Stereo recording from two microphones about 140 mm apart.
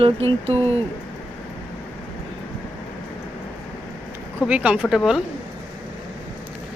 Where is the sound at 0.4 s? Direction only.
45° right (ahead or behind).